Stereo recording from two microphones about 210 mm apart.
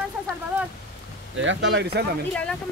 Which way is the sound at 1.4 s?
60° right (ahead or behind).